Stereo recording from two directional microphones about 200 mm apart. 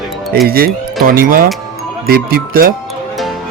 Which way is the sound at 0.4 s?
50° right (ahead or behind).